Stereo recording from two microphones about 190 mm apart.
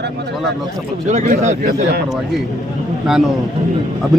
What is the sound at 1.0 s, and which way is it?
Speech, 40° right (ahead or behind).